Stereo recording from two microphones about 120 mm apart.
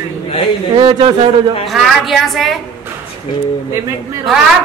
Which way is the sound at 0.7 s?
45° right (ahead or behind).